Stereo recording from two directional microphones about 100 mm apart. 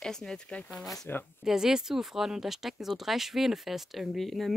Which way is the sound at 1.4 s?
5° right (ahead or behind).